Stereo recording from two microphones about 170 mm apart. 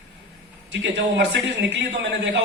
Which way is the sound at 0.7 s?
90° right.